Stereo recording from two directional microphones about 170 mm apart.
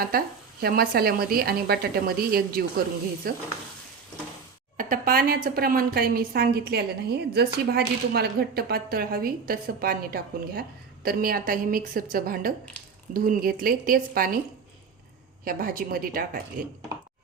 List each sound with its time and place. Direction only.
0.6 s a woman's voice: 65° right (ahead or behind)
4.8 s a woman's voice: 55° right (ahead or behind)
15.4 s a woman's voice: 55° right (ahead or behind)